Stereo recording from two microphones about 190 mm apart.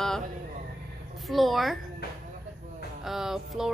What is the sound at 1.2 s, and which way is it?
Speech, centre (ahead or behind).